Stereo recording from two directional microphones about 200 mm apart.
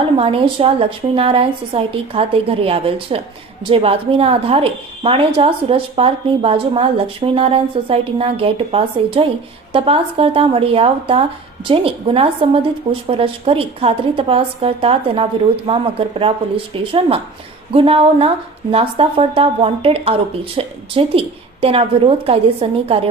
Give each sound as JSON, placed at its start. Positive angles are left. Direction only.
{"t": 0.0, "sound": "speech", "side_deg": -30}
{"t": 17.7, "sound": "speech", "side_deg": -30}